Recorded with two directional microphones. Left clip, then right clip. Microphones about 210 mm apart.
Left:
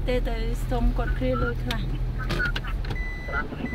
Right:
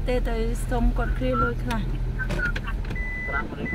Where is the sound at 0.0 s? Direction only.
15° right (ahead or behind).